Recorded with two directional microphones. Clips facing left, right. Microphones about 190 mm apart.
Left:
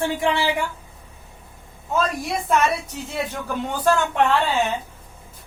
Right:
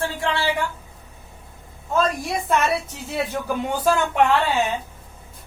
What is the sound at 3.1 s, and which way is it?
Speech, 10° right (ahead or behind).